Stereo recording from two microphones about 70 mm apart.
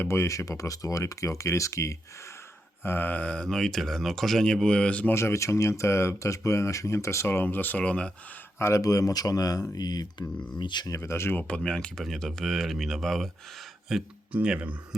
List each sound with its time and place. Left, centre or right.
0.1 s speech: left
2.8 s speech: left
5.1 s speech: left
7.3 s speech: left
8.5 s speech: left
8.8 s speech: left
10.9 s speech: left
11.3 s speech: centre
14.3 s speech: centre